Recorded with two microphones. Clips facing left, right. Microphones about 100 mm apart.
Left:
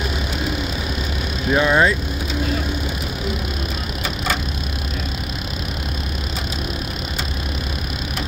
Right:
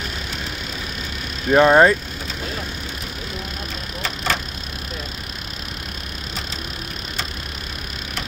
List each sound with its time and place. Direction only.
1.5 s speech: 45° right (ahead or behind)